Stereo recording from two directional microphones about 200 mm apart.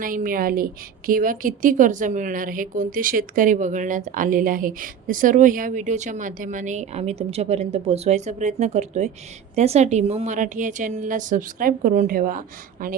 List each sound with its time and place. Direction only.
0.0 s a woman's voice: 45° right (ahead or behind)